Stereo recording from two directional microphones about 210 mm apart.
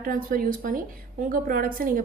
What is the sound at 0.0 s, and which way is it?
A woman's voice, 40° right (ahead or behind).